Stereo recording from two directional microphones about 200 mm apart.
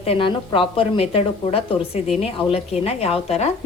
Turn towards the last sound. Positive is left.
turn(degrees=30)  # may be behind; listen again after turning